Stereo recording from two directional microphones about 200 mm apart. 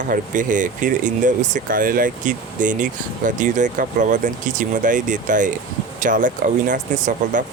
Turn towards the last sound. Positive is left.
turn(degrees=-40)  # may be behind; listen again after turning